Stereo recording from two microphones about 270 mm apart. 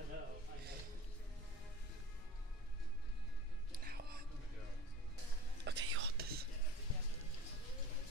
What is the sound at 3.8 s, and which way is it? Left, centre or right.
Whispering, right.